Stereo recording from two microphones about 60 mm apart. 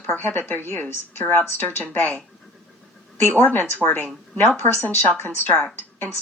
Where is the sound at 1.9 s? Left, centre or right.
Left.